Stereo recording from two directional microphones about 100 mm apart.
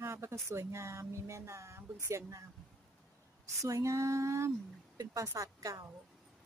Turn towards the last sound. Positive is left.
turn(degrees=-35)  # may be behind; listen again after turning